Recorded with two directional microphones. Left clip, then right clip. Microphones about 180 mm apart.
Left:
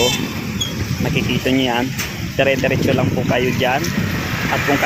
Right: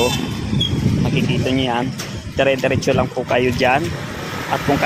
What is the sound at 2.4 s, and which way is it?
Speech, centre (ahead or behind).